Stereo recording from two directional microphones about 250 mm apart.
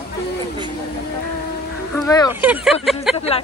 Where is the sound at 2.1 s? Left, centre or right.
Centre.